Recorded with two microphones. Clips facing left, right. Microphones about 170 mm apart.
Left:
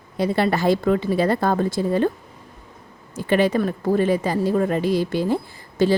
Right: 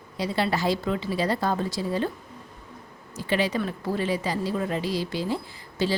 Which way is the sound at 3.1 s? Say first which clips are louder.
Left 7 dB; 55° left (ahead or behind).